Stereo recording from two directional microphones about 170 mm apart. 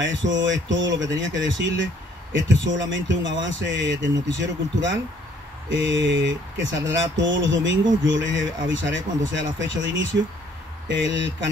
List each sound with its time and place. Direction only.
0.0 s speech: 90° right